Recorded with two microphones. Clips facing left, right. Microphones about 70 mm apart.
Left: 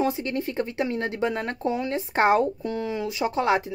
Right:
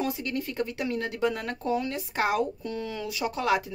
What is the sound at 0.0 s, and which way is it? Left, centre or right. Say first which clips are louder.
Speech: left 5 dB; left.